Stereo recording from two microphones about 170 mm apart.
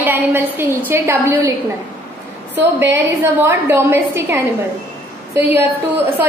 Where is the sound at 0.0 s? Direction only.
10° right (ahead or behind).